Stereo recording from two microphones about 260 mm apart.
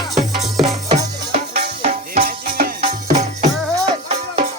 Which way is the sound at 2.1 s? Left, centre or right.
Right.